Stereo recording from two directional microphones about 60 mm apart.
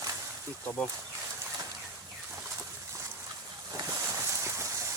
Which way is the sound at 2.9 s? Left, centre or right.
Right.